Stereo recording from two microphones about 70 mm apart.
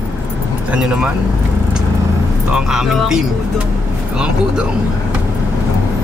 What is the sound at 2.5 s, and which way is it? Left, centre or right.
Speech, centre.